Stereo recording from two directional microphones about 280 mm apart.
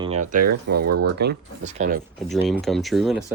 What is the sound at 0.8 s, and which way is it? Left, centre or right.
Speech, right.